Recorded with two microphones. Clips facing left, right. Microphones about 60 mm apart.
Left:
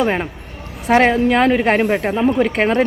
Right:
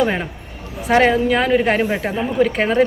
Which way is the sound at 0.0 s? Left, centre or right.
Left.